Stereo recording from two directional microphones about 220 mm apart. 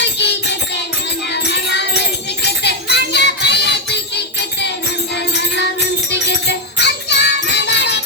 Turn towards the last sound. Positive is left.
turn(degrees=50)  # may be behind; listen again after turning